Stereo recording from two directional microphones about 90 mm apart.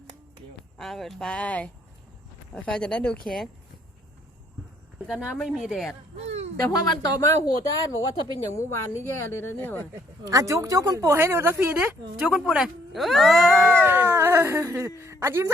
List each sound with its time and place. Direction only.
0.8 s speech: 5° left (ahead or behind)
5.0 s speech: 5° right (ahead or behind)
6.6 s speech: 40° left (ahead or behind); by 9.8 s 25° left (ahead or behind)
10.2 s speech: 40° right (ahead or behind)
11.2 s speech: 25° right (ahead or behind)
11.7 s speech: 15° right (ahead or behind); by 13.5 s centre (ahead or behind)
13.5 s speech: 20° right (ahead or behind)